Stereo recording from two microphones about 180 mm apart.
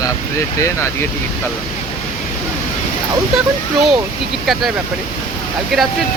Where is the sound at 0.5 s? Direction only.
15° left (ahead or behind).